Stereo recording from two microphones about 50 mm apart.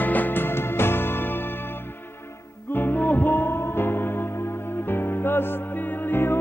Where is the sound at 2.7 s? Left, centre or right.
Left.